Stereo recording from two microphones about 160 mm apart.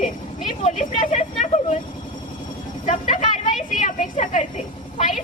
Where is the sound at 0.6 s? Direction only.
45° left (ahead or behind).